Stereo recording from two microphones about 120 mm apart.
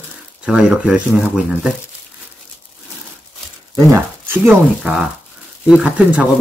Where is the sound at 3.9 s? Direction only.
20° right (ahead or behind).